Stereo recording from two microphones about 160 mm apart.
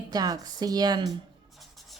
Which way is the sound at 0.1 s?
25° right (ahead or behind).